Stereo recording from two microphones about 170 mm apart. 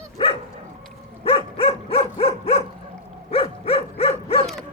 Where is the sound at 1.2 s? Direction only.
30° left (ahead or behind).